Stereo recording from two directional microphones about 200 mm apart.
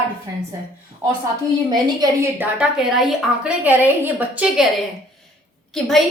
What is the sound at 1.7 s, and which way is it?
Speech, 20° right (ahead or behind).